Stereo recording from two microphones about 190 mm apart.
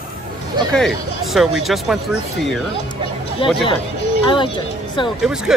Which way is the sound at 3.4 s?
25° left (ahead or behind).